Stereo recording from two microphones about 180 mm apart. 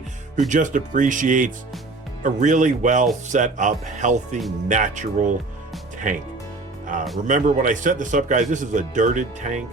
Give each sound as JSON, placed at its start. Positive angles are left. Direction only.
{"t": 0.3, "sound": "speech", "side_deg": -45}
{"t": 6.9, "sound": "speech", "side_deg": -45}